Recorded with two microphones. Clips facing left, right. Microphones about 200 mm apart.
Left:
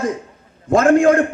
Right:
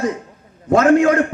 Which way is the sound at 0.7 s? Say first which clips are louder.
Left 1 dB; 50° left (ahead or behind).